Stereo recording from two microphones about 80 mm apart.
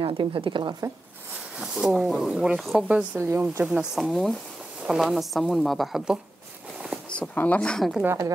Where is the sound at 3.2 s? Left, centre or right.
Right.